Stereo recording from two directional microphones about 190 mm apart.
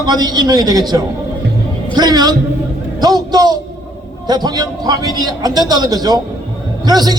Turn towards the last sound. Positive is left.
turn(degrees=-20)  # may be behind; listen again after turning